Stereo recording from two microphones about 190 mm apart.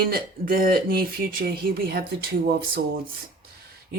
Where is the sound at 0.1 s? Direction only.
50° right (ahead or behind).